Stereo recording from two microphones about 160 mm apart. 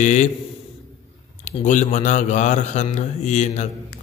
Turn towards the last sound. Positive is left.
turn(degrees=45)  # may be behind; listen again after turning